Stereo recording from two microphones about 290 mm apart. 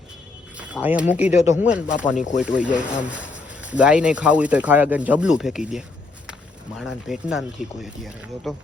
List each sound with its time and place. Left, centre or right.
0.5 s speech: centre
2.0 s speech: left
2.4 s speech: centre